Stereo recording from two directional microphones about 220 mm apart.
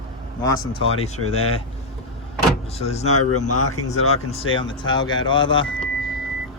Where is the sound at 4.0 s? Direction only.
75° left (ahead or behind).